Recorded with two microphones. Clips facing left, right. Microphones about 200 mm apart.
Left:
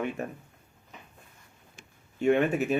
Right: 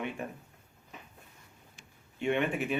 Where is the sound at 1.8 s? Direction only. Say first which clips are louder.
Left 6 dB; 40° left (ahead or behind).